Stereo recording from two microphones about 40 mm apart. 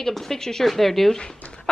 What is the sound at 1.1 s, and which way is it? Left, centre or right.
Speech, centre.